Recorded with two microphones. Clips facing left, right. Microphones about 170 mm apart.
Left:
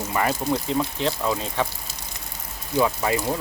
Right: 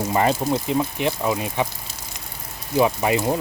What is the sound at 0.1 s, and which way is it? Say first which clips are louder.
Speech: right 4 dB; 25° right (ahead or behind).